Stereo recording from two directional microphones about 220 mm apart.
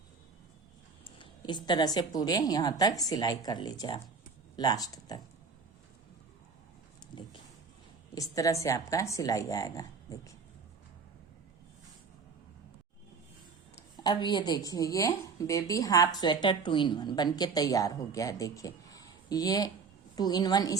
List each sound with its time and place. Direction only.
1.0 s a woman's voice: 20° left (ahead or behind)
8.1 s a woman's voice: 15° left (ahead or behind)
13.7 s a woman's voice: 20° left (ahead or behind)